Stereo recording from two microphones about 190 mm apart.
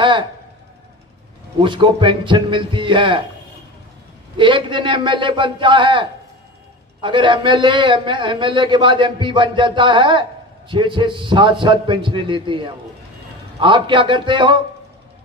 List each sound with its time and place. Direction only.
0.0 s speech: 25° right (ahead or behind)
1.6 s a man's voice: 25° right (ahead or behind)
4.4 s a man's voice: 25° right (ahead or behind)